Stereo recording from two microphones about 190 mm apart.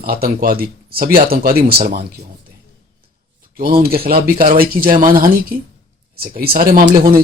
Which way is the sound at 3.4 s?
50° right (ahead or behind).